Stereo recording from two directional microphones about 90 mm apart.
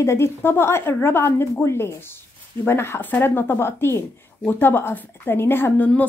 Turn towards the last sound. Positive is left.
turn(degrees=20)  # may be behind; listen again after turning